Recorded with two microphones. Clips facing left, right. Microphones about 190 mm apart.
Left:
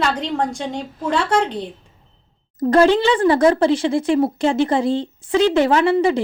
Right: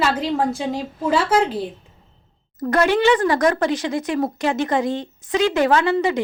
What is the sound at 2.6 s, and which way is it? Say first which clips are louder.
Speech: left 4 dB; 30° left (ahead or behind).